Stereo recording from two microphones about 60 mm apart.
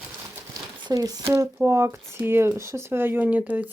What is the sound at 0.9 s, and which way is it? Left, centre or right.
Speech, right.